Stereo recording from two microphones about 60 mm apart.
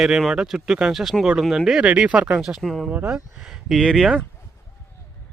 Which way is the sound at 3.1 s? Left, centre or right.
Centre.